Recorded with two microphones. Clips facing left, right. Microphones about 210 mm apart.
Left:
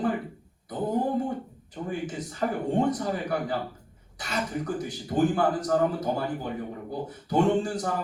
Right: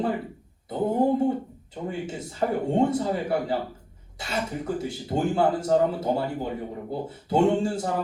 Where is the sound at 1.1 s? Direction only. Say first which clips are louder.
Right 5 dB; 25° right (ahead or behind).